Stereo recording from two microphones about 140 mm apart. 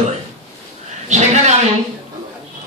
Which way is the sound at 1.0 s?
55° right (ahead or behind).